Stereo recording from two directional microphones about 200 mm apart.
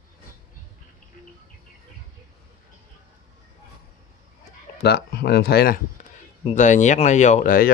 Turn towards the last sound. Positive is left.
turn(degrees=45)  # may be behind; listen again after turning